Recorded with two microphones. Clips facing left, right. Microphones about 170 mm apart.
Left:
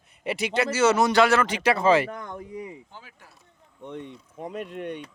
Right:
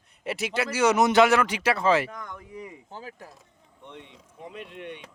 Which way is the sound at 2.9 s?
40° right (ahead or behind).